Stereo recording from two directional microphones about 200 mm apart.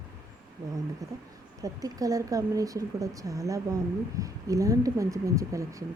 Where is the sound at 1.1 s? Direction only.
15° right (ahead or behind).